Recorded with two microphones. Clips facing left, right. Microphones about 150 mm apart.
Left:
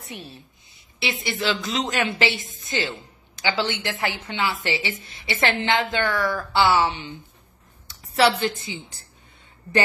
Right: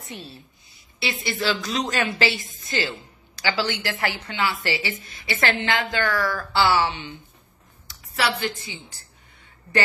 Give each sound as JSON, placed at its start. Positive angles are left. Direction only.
{"t": 0.0, "sound": "a woman's voice", "side_deg": 15}
{"t": 8.1, "sound": "a woman's voice", "side_deg": 25}